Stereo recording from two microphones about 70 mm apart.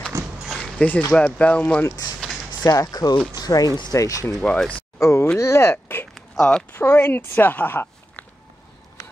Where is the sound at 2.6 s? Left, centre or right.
Left.